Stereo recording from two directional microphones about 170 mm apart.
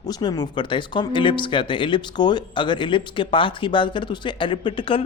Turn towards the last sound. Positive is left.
turn(degrees=30)  # may be behind; listen again after turning